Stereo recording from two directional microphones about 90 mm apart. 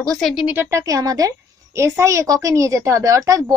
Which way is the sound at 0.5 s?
30° right (ahead or behind).